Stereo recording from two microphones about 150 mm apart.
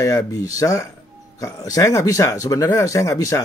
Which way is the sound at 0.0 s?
20° left (ahead or behind).